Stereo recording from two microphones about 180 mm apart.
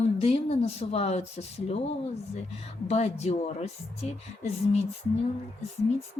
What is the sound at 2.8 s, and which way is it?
Speech, 35° left (ahead or behind).